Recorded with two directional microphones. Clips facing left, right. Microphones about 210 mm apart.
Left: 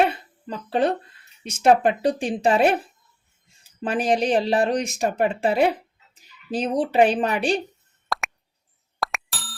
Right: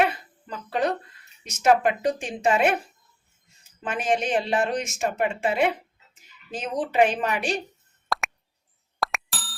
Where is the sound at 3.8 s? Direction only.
35° left (ahead or behind).